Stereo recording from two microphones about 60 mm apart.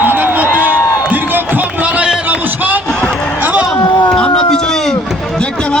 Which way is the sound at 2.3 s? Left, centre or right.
Right.